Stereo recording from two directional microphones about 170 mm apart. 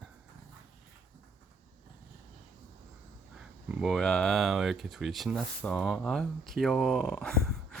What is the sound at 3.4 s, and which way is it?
Speech, 5° right (ahead or behind).